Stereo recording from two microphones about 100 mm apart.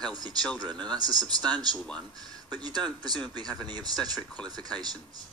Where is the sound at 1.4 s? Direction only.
10° left (ahead or behind).